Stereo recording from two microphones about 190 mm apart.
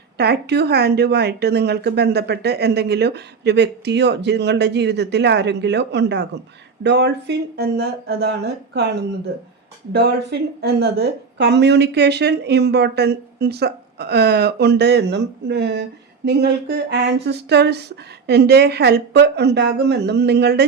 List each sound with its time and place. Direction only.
0.2 s speech: 60° right (ahead or behind)